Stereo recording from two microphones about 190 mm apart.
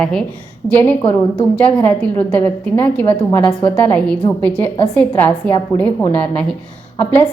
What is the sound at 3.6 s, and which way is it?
A woman's voice, 5° left (ahead or behind).